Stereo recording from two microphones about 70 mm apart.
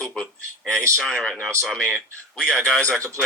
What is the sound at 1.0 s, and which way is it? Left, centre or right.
Speech, centre.